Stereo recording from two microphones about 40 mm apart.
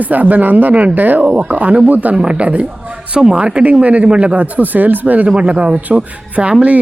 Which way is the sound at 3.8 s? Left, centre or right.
Right.